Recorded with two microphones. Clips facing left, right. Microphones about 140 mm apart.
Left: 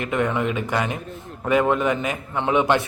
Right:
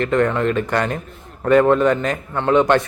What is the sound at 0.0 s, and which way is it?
Speech, 10° left (ahead or behind).